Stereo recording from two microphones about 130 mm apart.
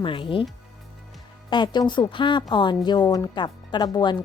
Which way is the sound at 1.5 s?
35° left (ahead or behind).